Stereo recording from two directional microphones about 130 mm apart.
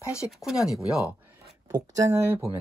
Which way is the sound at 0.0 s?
20° left (ahead or behind).